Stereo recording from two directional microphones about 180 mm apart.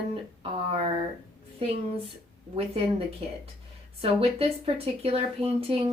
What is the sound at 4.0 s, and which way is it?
Speech, 30° right (ahead or behind).